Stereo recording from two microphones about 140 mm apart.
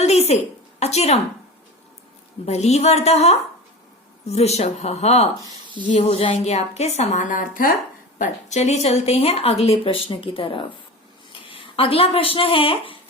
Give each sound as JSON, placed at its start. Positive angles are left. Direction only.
{"t": 0.0, "sound": "a sound", "side_deg": 50}
{"t": 0.8, "sound": "a woman's voice", "side_deg": 50}
{"t": 2.5, "sound": "a woman's voice", "side_deg": 50}
{"t": 8.2, "sound": "a woman's voice", "side_deg": 55}